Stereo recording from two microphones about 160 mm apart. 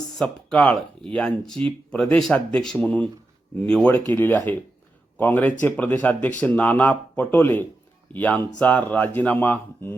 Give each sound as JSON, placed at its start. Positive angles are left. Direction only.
{"t": 0.2, "sound": "speech", "side_deg": 5}